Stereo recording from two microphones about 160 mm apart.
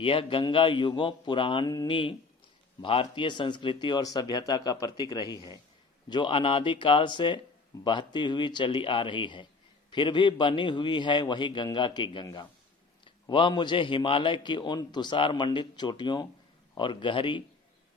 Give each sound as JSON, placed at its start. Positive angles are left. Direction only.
{"t": 0.0, "sound": "a man's voice", "side_deg": 35}